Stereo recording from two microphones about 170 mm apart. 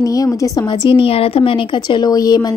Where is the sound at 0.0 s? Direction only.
20° left (ahead or behind).